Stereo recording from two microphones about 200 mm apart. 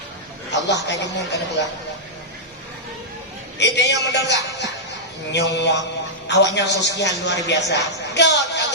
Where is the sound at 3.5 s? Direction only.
60° left (ahead or behind).